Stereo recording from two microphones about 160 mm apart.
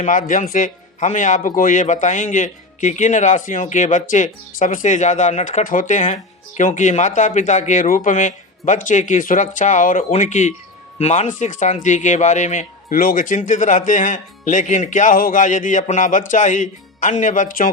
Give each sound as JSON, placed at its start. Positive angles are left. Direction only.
{"t": 0.0, "sound": "speech", "side_deg": 55}